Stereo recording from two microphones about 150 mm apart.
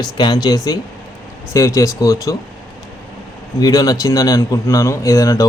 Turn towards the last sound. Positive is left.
turn(degrees=20)  # may be behind; listen again after turning